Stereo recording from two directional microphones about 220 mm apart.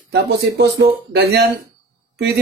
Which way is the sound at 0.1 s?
45° right (ahead or behind).